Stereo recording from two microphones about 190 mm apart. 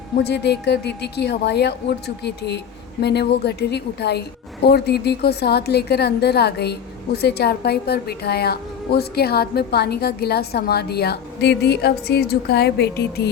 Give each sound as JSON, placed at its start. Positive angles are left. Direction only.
{"t": 0.2, "sound": "a woman's voice", "side_deg": 60}